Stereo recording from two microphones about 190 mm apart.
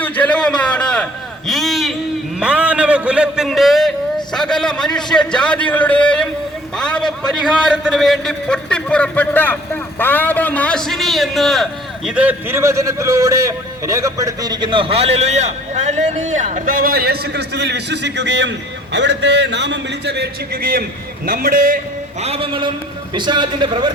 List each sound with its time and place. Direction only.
0.0 s a sound: 10° left (ahead or behind)
2.4 s a man's voice: 5° right (ahead or behind); by 21.8 s 45° right (ahead or behind)
22.2 s a man's voice: 30° right (ahead or behind)